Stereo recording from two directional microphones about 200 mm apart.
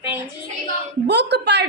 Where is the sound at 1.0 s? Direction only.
55° right (ahead or behind).